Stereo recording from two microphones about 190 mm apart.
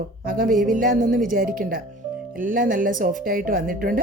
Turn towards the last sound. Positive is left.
turn(degrees=-45)  # may be behind; listen again after turning